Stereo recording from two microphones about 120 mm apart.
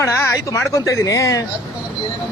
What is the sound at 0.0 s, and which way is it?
A woman's voice, 20° left (ahead or behind).